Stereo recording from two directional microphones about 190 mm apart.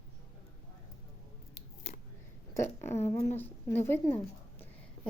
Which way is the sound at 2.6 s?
15° left (ahead or behind).